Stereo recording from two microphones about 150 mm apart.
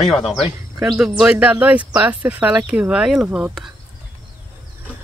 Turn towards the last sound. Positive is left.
turn(degrees=-5)  # may be behind; listen again after turning